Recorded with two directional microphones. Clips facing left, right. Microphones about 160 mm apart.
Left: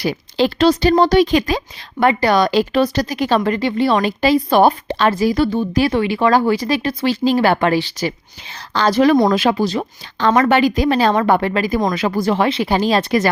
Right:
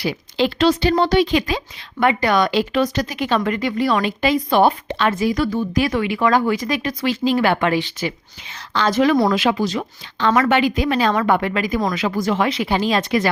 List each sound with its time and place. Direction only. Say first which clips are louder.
0.0 s speech: left 3 dB; 40° left (ahead or behind)